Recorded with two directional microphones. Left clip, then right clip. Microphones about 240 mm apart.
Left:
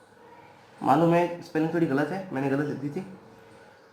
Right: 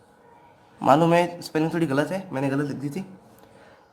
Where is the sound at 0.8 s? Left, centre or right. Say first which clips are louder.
Right 4 dB; right.